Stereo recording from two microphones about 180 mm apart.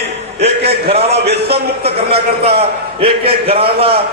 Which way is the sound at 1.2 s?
65° right (ahead or behind).